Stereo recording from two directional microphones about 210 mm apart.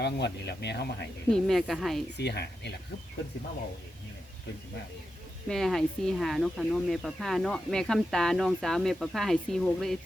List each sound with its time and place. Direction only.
0.0 s speech: 55° left (ahead or behind)
1.3 s speech: centre (ahead or behind)
2.1 s speech: 50° left (ahead or behind)
5.5 s speech: centre (ahead or behind)